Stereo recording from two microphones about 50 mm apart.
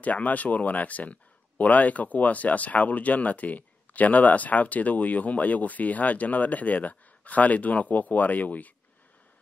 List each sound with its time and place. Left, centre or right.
0.0 s speech: left